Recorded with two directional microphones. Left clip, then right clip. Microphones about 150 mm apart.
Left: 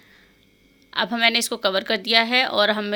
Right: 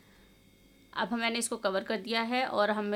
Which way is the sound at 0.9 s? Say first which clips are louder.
Left 12 dB; 20° left (ahead or behind).